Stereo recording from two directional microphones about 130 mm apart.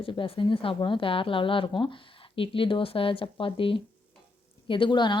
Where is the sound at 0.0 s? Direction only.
45° left (ahead or behind).